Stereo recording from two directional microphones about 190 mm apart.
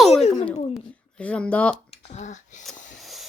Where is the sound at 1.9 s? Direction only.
40° left (ahead or behind).